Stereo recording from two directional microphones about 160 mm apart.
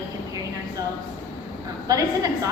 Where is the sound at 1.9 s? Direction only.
20° right (ahead or behind).